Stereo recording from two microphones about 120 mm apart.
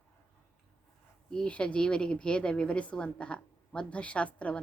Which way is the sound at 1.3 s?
10° left (ahead or behind).